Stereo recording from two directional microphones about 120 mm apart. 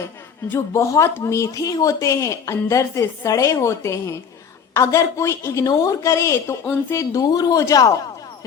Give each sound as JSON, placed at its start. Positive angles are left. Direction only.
{"t": 0.5, "sound": "speech", "side_deg": 25}